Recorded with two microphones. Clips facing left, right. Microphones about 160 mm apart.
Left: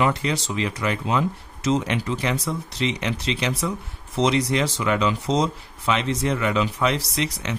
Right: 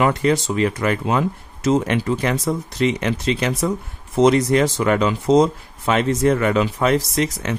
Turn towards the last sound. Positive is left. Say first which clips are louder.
# right 5 dB
turn(degrees=-45)  # may be behind; listen again after turning